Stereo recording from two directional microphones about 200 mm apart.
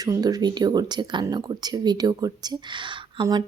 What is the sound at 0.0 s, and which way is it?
Speech, 20° right (ahead or behind).